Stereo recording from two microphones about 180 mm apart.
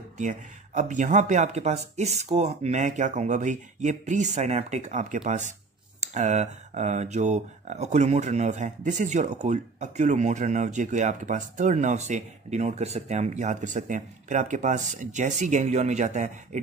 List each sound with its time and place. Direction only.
0.2 s speech: 45° right (ahead or behind)